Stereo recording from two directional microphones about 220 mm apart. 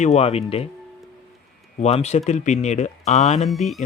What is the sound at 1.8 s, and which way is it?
Speech, 30° left (ahead or behind).